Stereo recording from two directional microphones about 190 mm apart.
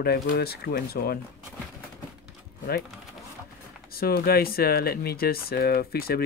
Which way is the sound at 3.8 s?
50° left (ahead or behind).